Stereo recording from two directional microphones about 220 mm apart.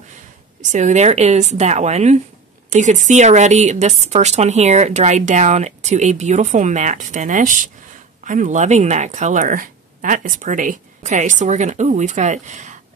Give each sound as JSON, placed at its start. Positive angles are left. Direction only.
{"t": 0.6, "sound": "a woman's voice", "side_deg": -35}